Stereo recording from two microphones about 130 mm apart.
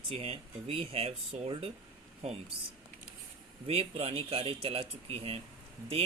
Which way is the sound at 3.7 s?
45° right (ahead or behind).